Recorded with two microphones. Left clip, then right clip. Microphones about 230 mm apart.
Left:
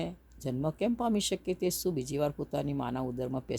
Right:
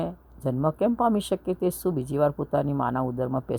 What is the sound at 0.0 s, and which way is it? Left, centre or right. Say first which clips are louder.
Speech: right 8 dB; centre.